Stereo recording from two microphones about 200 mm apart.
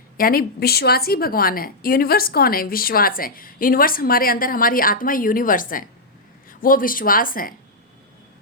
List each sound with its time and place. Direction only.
0.2 s a woman's voice: 45° left (ahead or behind)